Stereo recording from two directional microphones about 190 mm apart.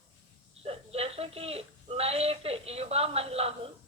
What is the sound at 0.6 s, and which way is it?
Speech, 30° right (ahead or behind).